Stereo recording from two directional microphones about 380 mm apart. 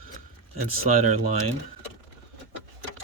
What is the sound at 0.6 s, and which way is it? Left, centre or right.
Speech, centre.